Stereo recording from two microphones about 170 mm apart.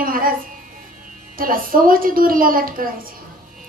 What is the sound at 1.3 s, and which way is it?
A woman's voice, 55° right (ahead or behind).